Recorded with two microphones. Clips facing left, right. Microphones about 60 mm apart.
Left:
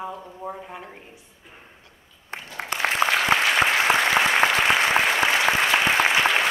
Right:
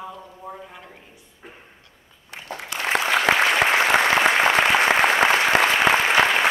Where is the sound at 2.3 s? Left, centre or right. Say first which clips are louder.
Left 2 dB; left.